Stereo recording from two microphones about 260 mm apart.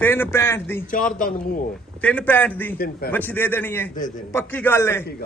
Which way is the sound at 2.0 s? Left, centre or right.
Centre.